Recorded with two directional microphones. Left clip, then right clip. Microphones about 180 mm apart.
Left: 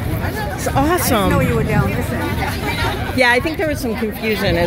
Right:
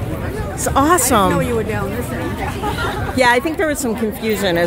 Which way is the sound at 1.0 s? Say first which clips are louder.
Right 2 dB; 40° right (ahead or behind).